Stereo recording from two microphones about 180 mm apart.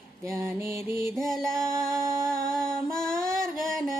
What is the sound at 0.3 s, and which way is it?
Mantra, 15° right (ahead or behind).